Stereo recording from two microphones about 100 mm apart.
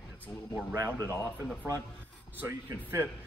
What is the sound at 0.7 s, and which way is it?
Speech, 35° right (ahead or behind).